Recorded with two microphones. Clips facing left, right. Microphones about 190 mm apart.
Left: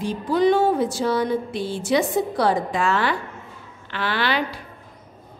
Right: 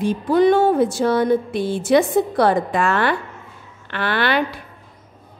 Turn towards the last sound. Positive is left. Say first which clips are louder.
# right 4 dB
turn(degrees=-55)  # may be behind; listen again after turning